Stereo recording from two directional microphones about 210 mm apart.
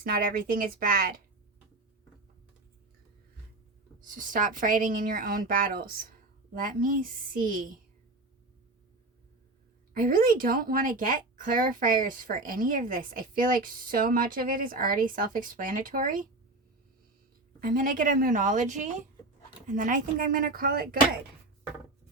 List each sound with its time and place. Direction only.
0.0 s speech: 45° right (ahead or behind)
4.0 s speech: 40° right (ahead or behind)
10.0 s speech: 40° right (ahead or behind)
17.6 s speech: 40° right (ahead or behind)